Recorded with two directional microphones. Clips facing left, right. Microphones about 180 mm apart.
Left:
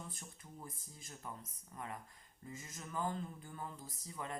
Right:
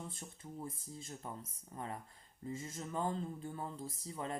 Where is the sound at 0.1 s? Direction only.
25° right (ahead or behind).